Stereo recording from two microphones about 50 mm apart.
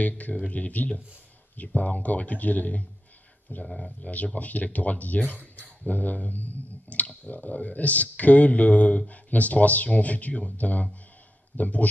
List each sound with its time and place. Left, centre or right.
0.0 s speech: left
3.6 s speech: centre
4.0 s speech: left
5.6 s a sound: left
7.2 s speech: left